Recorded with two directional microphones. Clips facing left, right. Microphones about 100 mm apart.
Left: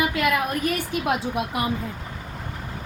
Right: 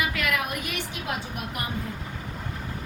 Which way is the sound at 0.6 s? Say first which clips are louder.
Left 8 dB; 40° left (ahead or behind).